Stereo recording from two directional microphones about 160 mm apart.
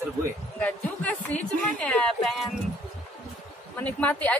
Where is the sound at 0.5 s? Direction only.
10° left (ahead or behind).